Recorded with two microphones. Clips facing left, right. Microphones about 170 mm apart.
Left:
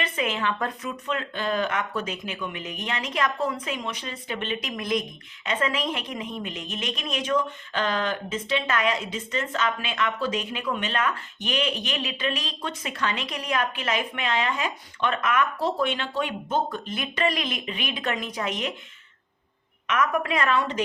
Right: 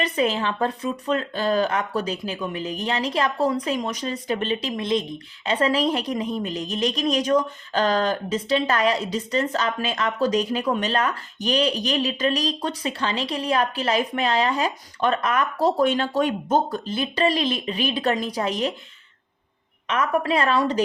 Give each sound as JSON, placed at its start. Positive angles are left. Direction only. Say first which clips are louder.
{"t": 0.0, "sound": "a woman's voice", "louder": "right 5 dB", "side_deg": -35}
{"t": 19.9, "sound": "a woman's voice", "louder": "right 3 dB", "side_deg": -30}